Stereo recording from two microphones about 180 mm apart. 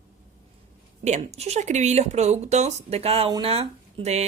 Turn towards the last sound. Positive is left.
turn(degrees=-35)  # may be behind; listen again after turning